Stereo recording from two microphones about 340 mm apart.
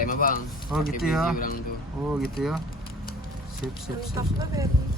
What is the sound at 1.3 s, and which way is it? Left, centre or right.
Speech, left.